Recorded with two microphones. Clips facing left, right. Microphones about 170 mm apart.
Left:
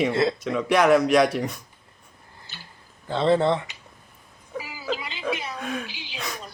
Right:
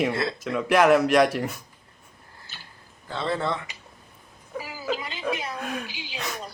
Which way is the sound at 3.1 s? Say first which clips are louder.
Left 7 dB; 25° left (ahead or behind).